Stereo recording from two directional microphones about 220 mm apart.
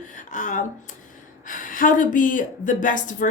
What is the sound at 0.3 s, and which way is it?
Speech, 35° left (ahead or behind).